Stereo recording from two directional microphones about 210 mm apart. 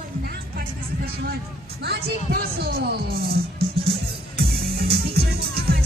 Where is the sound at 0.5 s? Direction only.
45° right (ahead or behind).